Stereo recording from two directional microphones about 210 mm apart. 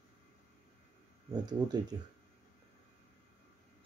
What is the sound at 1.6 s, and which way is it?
Speech, 20° right (ahead or behind).